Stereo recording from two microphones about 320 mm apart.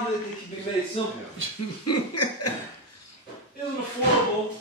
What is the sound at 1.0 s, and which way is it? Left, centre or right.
Speech, centre.